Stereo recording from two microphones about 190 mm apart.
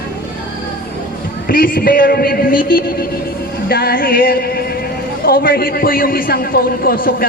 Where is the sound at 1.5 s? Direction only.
50° left (ahead or behind).